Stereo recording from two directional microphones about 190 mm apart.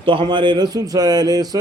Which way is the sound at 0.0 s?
25° right (ahead or behind).